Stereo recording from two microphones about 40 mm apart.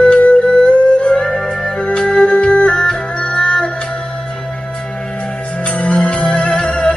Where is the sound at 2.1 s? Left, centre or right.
Left.